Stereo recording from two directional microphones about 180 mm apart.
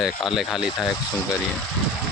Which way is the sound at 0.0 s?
Centre (ahead or behind).